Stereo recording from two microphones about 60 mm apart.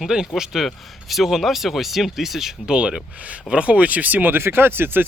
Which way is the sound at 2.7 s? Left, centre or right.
Centre.